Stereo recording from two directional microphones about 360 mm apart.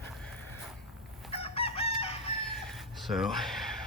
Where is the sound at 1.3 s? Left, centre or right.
Centre.